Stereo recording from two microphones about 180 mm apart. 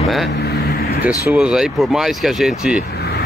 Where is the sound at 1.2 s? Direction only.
5° right (ahead or behind).